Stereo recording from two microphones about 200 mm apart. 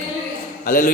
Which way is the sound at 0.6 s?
45° left (ahead or behind).